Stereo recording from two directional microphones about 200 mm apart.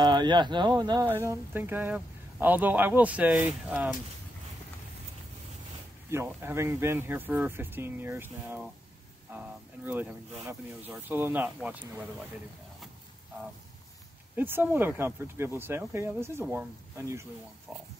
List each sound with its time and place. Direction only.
0.0 s speech: 20° right (ahead or behind)
6.0 s speech: 10° right (ahead or behind)
9.8 s speech: 10° right (ahead or behind)
14.3 s speech: 10° right (ahead or behind)